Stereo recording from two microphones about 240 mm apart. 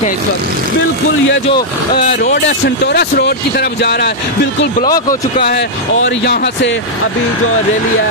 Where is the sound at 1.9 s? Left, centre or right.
Left.